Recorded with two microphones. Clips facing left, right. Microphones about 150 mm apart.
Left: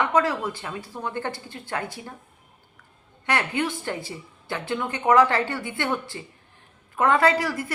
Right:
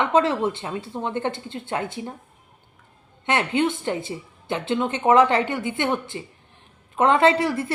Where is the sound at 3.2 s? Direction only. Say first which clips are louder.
Right 4 dB; 20° right (ahead or behind).